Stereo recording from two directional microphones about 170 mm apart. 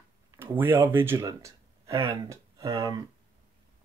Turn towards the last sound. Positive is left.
turn(degrees=-20)  # may be behind; listen again after turning